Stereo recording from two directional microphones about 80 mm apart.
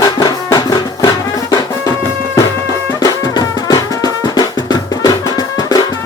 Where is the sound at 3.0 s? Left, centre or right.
Left.